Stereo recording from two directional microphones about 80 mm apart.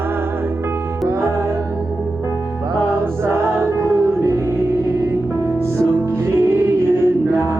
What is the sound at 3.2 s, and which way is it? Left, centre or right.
Music, right.